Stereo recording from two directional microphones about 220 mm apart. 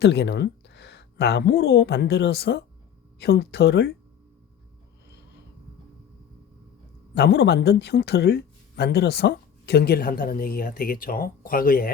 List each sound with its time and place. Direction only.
0.0 s speech: 50° left (ahead or behind)
7.1 s speech: 50° left (ahead or behind)